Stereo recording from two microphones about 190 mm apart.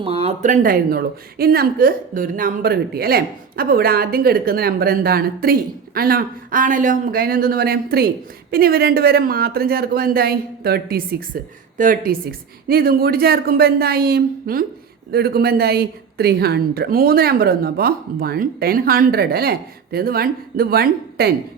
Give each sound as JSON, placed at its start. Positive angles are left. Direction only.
{"t": 0.0, "sound": "a woman's voice", "side_deg": -30}